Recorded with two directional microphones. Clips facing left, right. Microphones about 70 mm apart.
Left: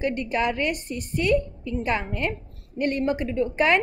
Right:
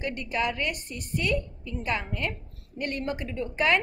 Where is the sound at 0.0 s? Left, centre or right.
Left.